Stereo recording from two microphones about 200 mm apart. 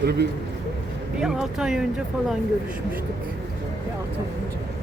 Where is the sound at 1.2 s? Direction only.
5° right (ahead or behind).